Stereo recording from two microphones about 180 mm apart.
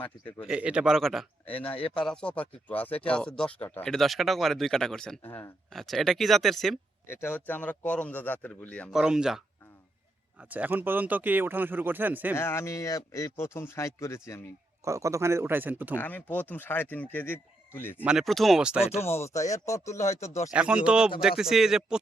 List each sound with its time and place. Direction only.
0.0 s speech: 10° left (ahead or behind)
0.4 s speech: 5° right (ahead or behind)
1.7 s speech: 30° left (ahead or behind)
2.0 s speech: 5° left (ahead or behind)
7.1 s speech: 10° left (ahead or behind)
8.9 s speech: 5° right (ahead or behind)
10.5 s speech: 10° right (ahead or behind)
12.4 s speech: 15° left (ahead or behind)
14.8 s speech: 15° right (ahead or behind)
16.0 s speech: 10° left (ahead or behind)
18.0 s speech: 5° right (ahead or behind)
18.9 s speech: 15° left (ahead or behind)
20.5 s speech: 5° right (ahead or behind)